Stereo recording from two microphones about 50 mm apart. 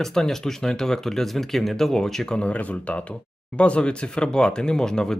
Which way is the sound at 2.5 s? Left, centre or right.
Left.